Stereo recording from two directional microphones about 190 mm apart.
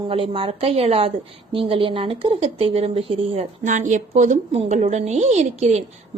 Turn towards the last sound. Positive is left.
turn(degrees=-35)  # may be behind; listen again after turning